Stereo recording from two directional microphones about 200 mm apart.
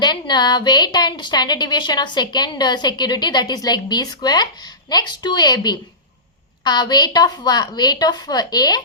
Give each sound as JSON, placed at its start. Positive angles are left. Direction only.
{"t": 0.0, "sound": "speech", "side_deg": 20}